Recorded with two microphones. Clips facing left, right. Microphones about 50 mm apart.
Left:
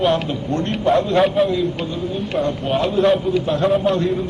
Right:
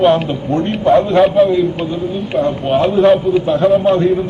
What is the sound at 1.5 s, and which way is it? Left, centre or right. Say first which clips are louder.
A man's voice: right 6 dB; centre.